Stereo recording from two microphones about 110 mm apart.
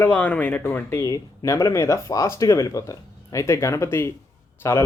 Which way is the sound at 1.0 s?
30° left (ahead or behind).